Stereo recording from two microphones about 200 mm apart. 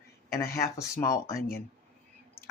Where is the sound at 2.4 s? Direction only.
5° right (ahead or behind).